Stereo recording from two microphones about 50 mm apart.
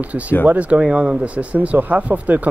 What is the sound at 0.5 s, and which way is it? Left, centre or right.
Speech, right.